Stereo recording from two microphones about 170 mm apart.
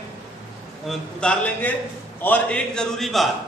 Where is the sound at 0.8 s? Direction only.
5° left (ahead or behind).